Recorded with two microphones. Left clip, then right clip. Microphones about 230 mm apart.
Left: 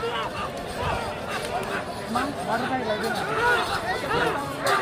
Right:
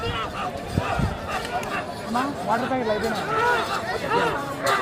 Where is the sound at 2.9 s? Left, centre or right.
Centre.